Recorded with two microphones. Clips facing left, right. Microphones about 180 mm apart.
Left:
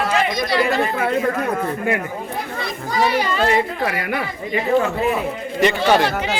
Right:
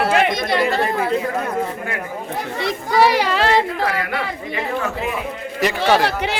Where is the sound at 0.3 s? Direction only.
25° right (ahead or behind).